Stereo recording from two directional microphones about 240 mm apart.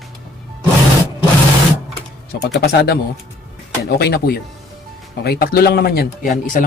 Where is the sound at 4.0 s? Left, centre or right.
Left.